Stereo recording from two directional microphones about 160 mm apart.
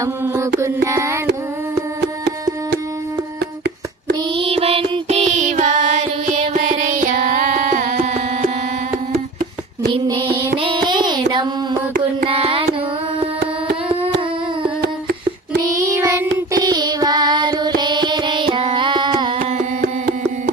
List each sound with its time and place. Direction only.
0.9 s carnatic music: 20° right (ahead or behind)
4.4 s music: 35° right (ahead or behind)
9.9 s a sound: 35° right (ahead or behind)
12.2 s carnatic music: 35° right (ahead or behind)
15.8 s child singing: 20° right (ahead or behind)